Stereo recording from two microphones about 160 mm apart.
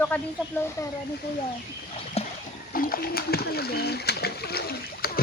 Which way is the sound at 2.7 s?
65° left (ahead or behind).